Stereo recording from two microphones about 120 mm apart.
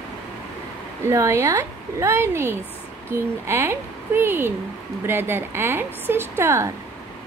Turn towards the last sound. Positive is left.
turn(degrees=-25)  # may be behind; listen again after turning